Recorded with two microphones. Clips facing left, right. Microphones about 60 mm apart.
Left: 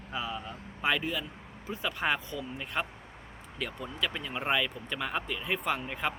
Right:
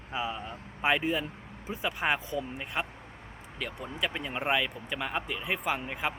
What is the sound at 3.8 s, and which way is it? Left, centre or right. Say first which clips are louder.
Speech: right 2 dB; centre.